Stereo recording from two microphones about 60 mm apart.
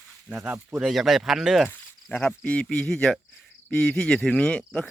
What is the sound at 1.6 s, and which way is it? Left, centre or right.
Speech, left.